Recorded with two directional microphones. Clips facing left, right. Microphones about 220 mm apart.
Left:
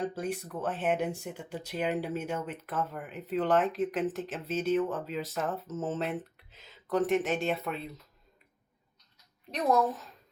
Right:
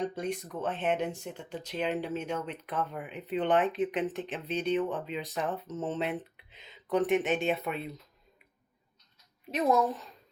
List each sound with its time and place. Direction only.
0.0 s speech: 5° left (ahead or behind)
9.5 s speech: centre (ahead or behind)